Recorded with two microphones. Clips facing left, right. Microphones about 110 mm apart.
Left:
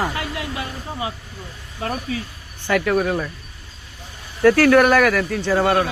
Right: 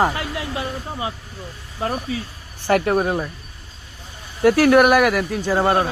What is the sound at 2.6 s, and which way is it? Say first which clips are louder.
Speech: right 1 dB; 35° right (ahead or behind).